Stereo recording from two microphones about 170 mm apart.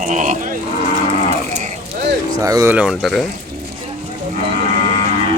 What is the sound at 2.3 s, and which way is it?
Speech, 20° right (ahead or behind).